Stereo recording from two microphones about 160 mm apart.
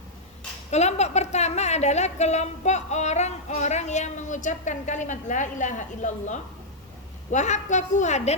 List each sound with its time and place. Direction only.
0.7 s a woman's voice: 45° left (ahead or behind)